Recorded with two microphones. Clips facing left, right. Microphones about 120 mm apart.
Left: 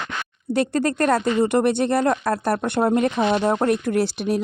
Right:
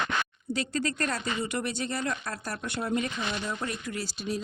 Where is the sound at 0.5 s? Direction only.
60° left (ahead or behind).